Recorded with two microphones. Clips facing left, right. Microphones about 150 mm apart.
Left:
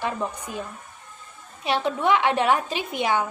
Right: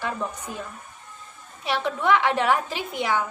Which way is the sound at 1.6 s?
20° left (ahead or behind).